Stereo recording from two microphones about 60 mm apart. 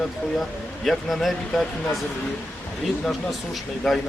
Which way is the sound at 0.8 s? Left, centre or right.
Centre.